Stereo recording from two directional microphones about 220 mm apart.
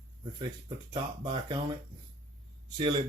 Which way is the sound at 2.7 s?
20° right (ahead or behind).